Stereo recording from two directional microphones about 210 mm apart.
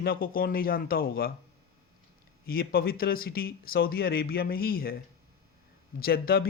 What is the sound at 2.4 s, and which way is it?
Speech, 45° left (ahead or behind).